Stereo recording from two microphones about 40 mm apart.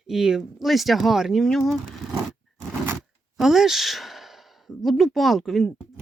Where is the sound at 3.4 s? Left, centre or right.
Centre.